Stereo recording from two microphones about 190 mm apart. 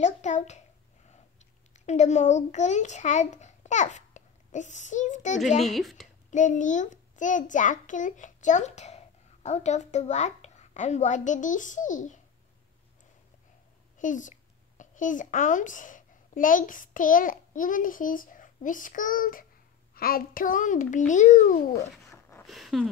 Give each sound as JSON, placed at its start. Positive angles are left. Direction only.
{"t": 0.0, "sound": "a child's voice", "side_deg": 40}
{"t": 1.9, "sound": "a child's voice", "side_deg": 35}
{"t": 5.6, "sound": "speech", "side_deg": 0}
{"t": 6.3, "sound": "a child's voice", "side_deg": 40}
{"t": 13.9, "sound": "a child's voice", "side_deg": 40}
{"t": 22.3, "sound": "a sound", "side_deg": 0}